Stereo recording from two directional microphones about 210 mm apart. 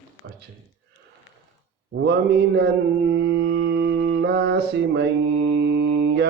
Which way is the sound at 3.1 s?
55° right (ahead or behind).